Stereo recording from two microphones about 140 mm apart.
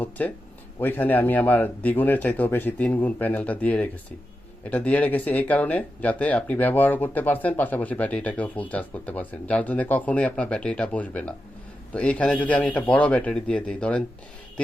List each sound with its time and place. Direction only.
0.2 s speech: 10° left (ahead or behind)